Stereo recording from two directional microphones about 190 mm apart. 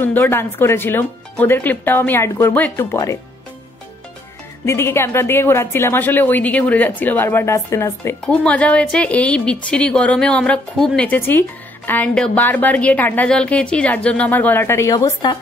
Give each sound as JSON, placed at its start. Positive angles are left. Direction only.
{"t": 0.0, "sound": "speech", "side_deg": 10}
{"t": 4.6, "sound": "speech", "side_deg": 15}